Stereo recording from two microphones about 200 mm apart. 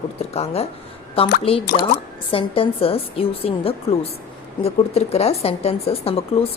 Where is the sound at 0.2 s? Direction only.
30° left (ahead or behind).